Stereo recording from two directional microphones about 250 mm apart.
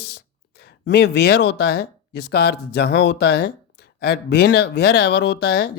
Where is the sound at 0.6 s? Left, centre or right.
Left.